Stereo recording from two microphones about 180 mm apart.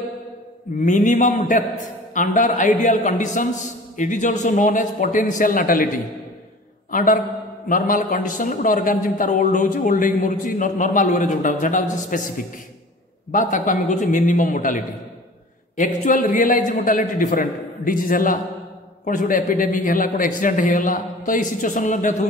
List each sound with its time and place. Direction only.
0.7 s a man's voice: 45° left (ahead or behind)
6.9 s a man's voice: 50° left (ahead or behind)